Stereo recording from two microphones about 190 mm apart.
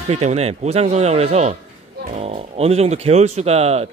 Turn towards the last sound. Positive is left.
turn(degrees=-35)  # may be behind; listen again after turning